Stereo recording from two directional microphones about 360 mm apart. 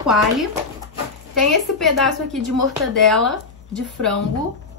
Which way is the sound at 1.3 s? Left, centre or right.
Centre.